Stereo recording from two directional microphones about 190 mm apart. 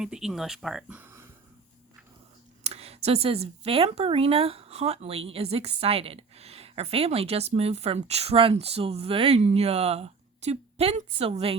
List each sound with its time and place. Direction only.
0.0 s speech: 5° right (ahead or behind)
2.6 s speech: 30° right (ahead or behind)